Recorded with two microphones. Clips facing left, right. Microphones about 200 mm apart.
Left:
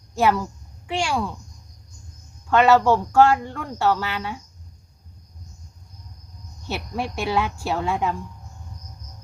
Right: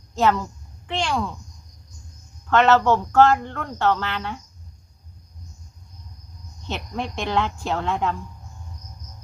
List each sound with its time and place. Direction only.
0.1 s a woman's voice: 10° left (ahead or behind)
2.5 s speech: 10° left (ahead or behind)
6.7 s speech: 10° left (ahead or behind)